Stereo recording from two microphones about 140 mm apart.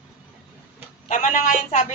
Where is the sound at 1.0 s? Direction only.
60° left (ahead or behind).